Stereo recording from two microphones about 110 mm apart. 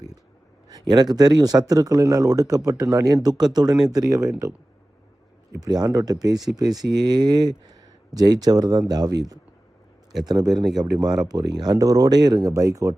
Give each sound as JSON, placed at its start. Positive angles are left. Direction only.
{"t": 0.7, "sound": "speech", "side_deg": -40}
{"t": 5.6, "sound": "speech", "side_deg": -40}